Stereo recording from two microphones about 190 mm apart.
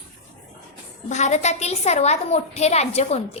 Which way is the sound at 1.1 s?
35° left (ahead or behind).